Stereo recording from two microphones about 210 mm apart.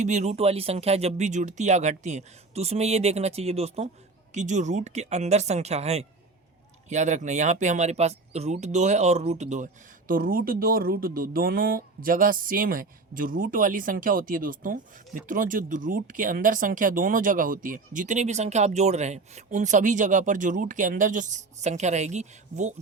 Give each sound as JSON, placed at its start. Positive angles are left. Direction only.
{"t": 0.0, "sound": "speech", "side_deg": -35}